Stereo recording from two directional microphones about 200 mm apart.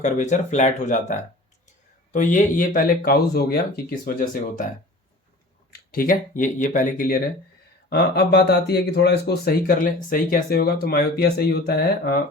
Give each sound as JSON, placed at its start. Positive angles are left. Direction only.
{"t": 0.0, "sound": "speech", "side_deg": 35}
{"t": 5.9, "sound": "speech", "side_deg": 45}